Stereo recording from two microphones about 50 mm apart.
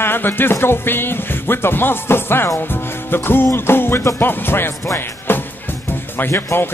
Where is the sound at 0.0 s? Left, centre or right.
Left.